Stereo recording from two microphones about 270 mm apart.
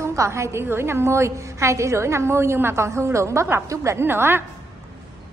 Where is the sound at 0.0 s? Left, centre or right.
Centre.